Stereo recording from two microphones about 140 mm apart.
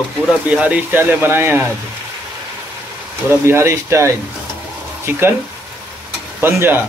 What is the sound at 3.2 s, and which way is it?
Speech, 20° right (ahead or behind).